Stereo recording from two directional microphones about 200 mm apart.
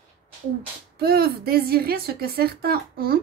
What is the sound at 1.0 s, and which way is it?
Speech, 50° right (ahead or behind).